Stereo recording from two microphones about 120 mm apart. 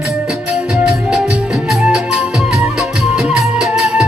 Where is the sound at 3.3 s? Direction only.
5° right (ahead or behind).